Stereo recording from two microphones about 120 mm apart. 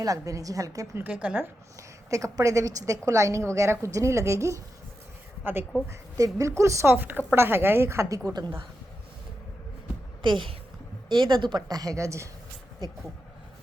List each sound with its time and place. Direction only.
0.0 s speech: 30° right (ahead or behind)
1.0 s a woman's voice: 10° right (ahead or behind)
2.0 s speech: 25° right (ahead or behind)
5.9 s speech: 30° right (ahead or behind)
10.2 s a woman's voice: 45° right (ahead or behind)